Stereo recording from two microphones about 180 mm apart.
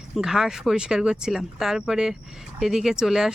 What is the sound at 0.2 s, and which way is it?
Speech, centre (ahead or behind).